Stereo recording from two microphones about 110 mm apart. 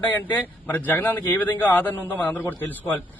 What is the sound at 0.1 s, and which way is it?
A man's voice, 15° left (ahead or behind).